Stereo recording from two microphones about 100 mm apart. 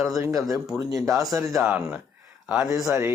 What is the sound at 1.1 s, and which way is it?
Speech, 30° right (ahead or behind).